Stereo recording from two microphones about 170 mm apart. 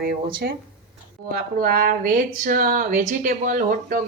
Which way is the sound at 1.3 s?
55° right (ahead or behind).